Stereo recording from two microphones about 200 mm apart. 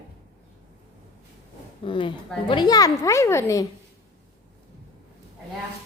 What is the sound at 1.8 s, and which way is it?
A child's voice, 25° left (ahead or behind).